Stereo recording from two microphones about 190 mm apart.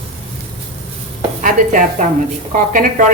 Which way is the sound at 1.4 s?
45° right (ahead or behind).